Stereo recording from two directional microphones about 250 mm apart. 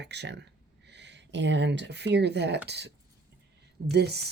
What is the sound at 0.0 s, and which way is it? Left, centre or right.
Speech, right.